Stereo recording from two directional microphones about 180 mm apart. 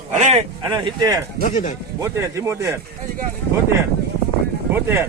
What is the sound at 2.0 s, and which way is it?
Speech, 15° right (ahead or behind).